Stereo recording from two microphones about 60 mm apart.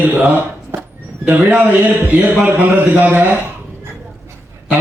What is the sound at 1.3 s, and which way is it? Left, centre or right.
A man's voice, right.